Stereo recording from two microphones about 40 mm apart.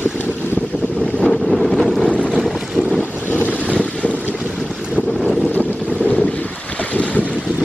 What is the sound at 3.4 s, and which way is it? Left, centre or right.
Boat, left.